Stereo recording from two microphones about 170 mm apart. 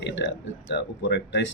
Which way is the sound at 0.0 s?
90° left.